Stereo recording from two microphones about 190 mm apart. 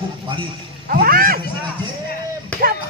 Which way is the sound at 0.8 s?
50° right (ahead or behind).